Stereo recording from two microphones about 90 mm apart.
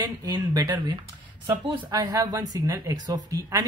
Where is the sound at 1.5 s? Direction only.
60° right (ahead or behind).